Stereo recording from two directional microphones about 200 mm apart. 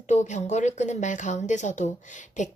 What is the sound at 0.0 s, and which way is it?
Speech, 35° left (ahead or behind).